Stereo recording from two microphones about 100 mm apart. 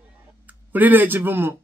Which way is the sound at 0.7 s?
15° right (ahead or behind).